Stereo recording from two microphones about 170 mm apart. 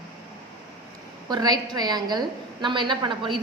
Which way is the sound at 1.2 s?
25° right (ahead or behind).